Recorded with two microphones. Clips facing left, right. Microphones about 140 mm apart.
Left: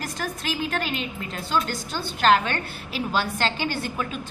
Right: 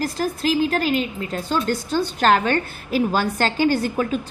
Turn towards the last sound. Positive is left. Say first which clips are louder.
# right 8 dB
turn(degrees=-40)  # may be behind; listen again after turning